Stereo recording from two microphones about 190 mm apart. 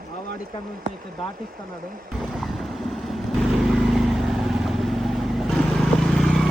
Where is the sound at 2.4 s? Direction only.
Centre (ahead or behind).